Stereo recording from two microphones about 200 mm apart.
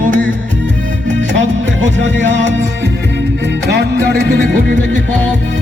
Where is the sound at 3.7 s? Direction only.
55° right (ahead or behind).